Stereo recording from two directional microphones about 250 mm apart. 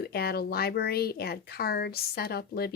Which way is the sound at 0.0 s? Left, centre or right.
Left.